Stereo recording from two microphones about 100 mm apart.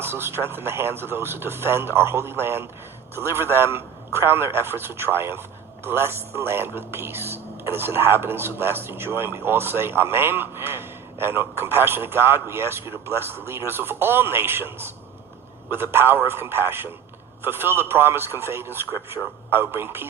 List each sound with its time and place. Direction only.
0.0 s a man's voice: 25° right (ahead or behind)